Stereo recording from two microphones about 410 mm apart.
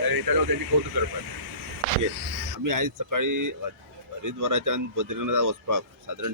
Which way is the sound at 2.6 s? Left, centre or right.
Right.